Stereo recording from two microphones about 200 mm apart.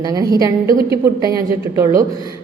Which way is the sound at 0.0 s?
20° right (ahead or behind).